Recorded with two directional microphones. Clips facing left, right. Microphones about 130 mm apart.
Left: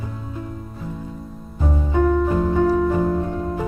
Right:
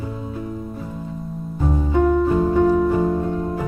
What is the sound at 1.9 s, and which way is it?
Music, 15° right (ahead or behind).